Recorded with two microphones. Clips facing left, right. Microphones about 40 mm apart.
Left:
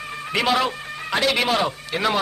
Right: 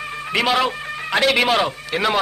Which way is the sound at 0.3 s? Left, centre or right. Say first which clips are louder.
Right 2 dB; centre.